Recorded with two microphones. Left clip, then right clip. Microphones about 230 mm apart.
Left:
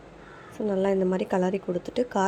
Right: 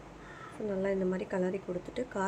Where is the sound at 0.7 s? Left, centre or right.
Left.